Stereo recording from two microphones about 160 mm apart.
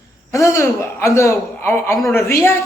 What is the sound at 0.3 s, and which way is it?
A man's voice, 15° left (ahead or behind).